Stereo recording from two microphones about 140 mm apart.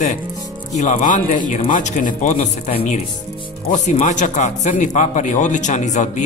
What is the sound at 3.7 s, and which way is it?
Speech, 65° left (ahead or behind).